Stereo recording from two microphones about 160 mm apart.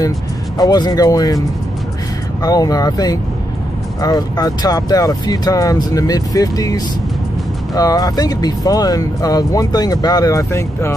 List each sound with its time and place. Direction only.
0.6 s speech: 25° left (ahead or behind)
2.4 s speech: 25° left (ahead or behind)